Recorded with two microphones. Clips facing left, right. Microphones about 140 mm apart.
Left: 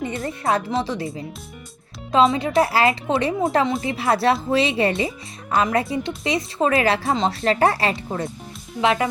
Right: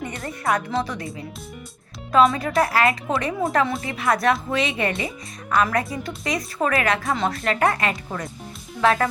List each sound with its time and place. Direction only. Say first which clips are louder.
0.2 s music: left 1 dB; 25° left (ahead or behind)
0.8 s speech: left 2 dB; 30° left (ahead or behind)
8.8 s speech: even; 20° left (ahead or behind)